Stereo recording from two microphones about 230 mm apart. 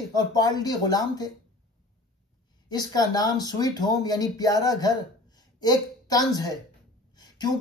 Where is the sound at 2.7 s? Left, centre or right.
Centre.